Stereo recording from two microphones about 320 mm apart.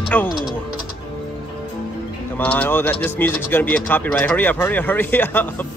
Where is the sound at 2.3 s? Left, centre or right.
Centre.